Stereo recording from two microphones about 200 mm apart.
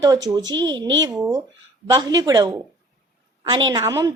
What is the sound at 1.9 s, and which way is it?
A woman's voice, 20° right (ahead or behind).